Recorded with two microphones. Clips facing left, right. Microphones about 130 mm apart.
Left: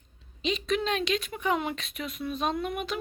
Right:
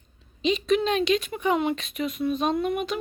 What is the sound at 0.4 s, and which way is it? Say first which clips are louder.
A woman's voice: right 6 dB; centre (ahead or behind).